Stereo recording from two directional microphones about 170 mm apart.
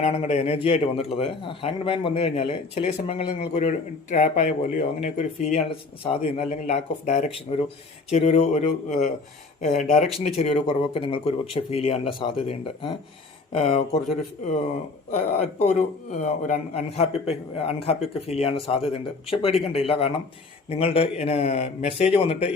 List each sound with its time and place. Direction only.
0.0 s a man's voice: 40° left (ahead or behind)
10.2 s a man's voice: 35° left (ahead or behind)